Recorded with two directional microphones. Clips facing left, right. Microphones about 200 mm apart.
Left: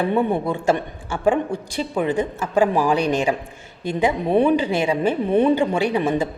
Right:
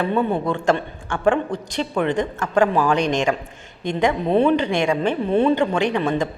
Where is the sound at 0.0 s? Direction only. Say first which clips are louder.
Left 1 dB; 10° left (ahead or behind).